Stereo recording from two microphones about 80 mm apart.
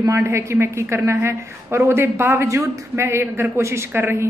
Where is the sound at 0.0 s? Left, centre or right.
Right.